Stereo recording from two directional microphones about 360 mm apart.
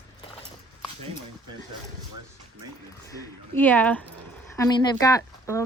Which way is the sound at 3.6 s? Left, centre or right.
Centre.